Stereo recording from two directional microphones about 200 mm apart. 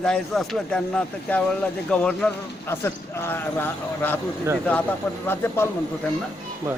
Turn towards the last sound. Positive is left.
turn(degrees=-15)  # may be behind; listen again after turning